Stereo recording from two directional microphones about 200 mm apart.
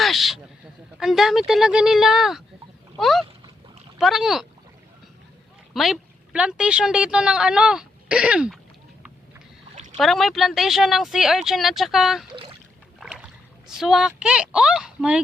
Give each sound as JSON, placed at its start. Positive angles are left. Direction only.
{"t": 0.0, "sound": "speech", "side_deg": 0}
{"t": 5.7, "sound": "a woman's voice", "side_deg": 0}
{"t": 9.7, "sound": "boat", "side_deg": -35}
{"t": 10.0, "sound": "speech", "side_deg": 0}